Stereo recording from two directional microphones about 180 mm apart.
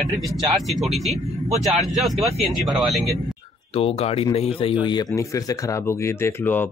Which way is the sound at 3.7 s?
35° left (ahead or behind).